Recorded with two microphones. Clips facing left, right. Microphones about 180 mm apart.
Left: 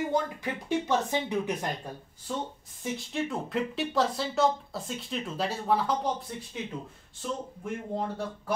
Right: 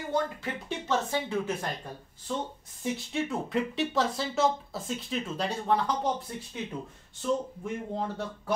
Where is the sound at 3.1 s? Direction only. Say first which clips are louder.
Even; centre (ahead or behind).